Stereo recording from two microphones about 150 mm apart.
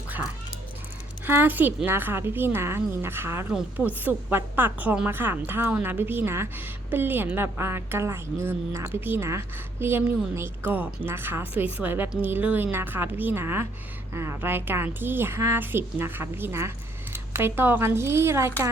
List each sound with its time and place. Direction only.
1.2 s speech: 15° right (ahead or behind)